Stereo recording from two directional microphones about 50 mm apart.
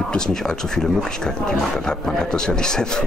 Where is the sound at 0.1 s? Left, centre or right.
Centre.